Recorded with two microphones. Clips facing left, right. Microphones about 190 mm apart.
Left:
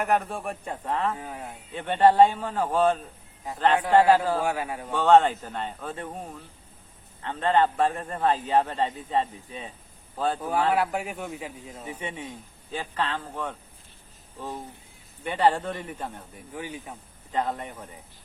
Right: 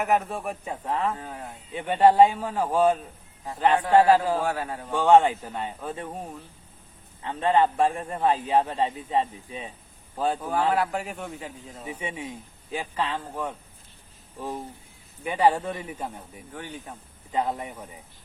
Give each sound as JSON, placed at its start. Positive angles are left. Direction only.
{"t": 0.0, "sound": "a man's voice", "side_deg": -5}
{"t": 1.1, "sound": "speech", "side_deg": 10}
{"t": 1.7, "sound": "a man's voice", "side_deg": -10}
{"t": 4.1, "sound": "a man's voice", "side_deg": -10}
{"t": 4.4, "sound": "speech", "side_deg": 10}
{"t": 4.9, "sound": "a man's voice", "side_deg": -10}
{"t": 10.7, "sound": "speech", "side_deg": 10}
{"t": 11.9, "sound": "a man's voice", "side_deg": -10}
{"t": 16.5, "sound": "speech", "side_deg": 10}
{"t": 17.3, "sound": "a man's voice", "side_deg": -5}